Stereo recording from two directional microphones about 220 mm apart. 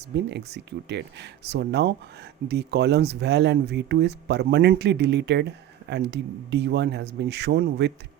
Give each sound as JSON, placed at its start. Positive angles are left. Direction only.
{"t": 0.2, "sound": "speech", "side_deg": -50}